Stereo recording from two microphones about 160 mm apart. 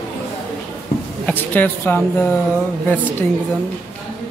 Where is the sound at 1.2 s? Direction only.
10° left (ahead or behind).